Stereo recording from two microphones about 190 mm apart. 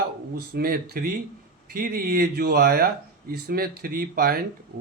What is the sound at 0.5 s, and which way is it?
Speech, 55° right (ahead or behind).